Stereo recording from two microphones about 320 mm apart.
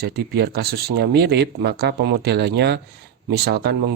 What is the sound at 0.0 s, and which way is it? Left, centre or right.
A man's voice, right.